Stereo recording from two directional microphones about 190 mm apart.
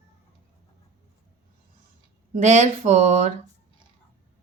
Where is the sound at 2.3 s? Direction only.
40° right (ahead or behind).